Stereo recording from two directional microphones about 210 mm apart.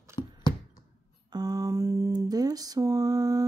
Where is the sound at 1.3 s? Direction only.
15° right (ahead or behind).